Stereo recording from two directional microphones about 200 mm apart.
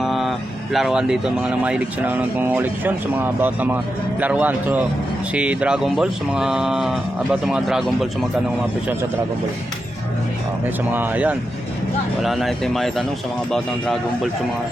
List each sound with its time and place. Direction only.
0.0 s speech: centre (ahead or behind)
10.9 s speech: 10° right (ahead or behind)